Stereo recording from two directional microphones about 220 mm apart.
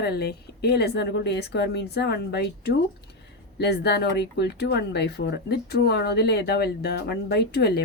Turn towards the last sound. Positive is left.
turn(degrees=50)  # may be behind; listen again after turning